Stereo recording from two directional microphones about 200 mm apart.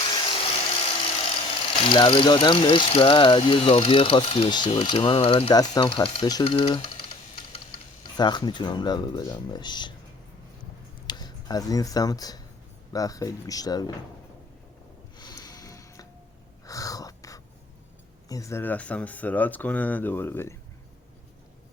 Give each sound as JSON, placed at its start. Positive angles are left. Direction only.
{"t": 0.0, "sound": "speech", "side_deg": 25}
{"t": 8.1, "sound": "speech", "side_deg": 20}
{"t": 11.0, "sound": "speech", "side_deg": 20}
{"t": 15.2, "sound": "snort", "side_deg": 20}
{"t": 16.6, "sound": "a sound", "side_deg": 15}
{"t": 18.3, "sound": "speech", "side_deg": 15}